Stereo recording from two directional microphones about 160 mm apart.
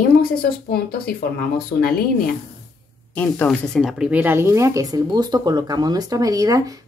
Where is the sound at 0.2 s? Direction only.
70° left (ahead or behind).